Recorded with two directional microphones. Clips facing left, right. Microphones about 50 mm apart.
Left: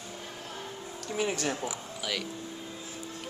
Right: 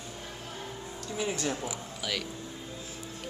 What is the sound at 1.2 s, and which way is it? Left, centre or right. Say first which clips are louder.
Speech: left 2 dB; left.